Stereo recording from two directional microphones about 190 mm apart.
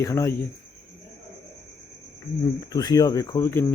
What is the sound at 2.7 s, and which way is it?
Speech, 20° left (ahead or behind).